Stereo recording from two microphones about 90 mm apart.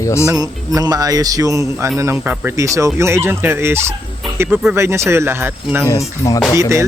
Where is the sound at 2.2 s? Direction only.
20° right (ahead or behind).